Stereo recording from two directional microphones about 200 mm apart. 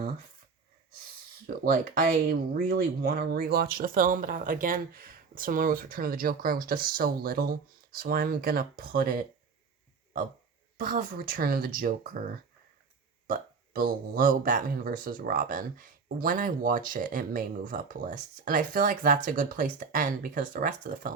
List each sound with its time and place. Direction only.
1.5 s speech: 45° right (ahead or behind)
10.8 s speech: 45° right (ahead or behind)
13.7 s speech: 40° right (ahead or behind)